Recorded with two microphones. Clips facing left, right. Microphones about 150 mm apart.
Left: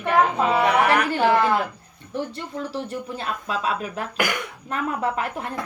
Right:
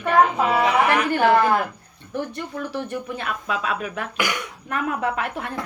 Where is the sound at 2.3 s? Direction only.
30° left (ahead or behind).